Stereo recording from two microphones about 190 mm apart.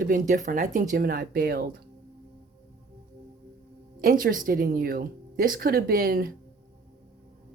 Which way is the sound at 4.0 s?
50° right (ahead or behind).